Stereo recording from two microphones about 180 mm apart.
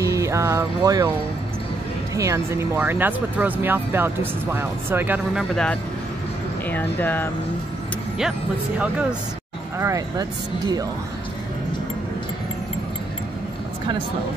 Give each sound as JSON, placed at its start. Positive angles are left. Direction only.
{"t": 0.0, "sound": "music", "side_deg": -15}
{"t": 2.1, "sound": "speech", "side_deg": -15}
{"t": 5.5, "sound": "speech", "side_deg": 5}
{"t": 8.2, "sound": "speech", "side_deg": -5}